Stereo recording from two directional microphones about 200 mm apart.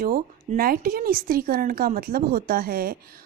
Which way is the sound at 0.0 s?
45° right (ahead or behind).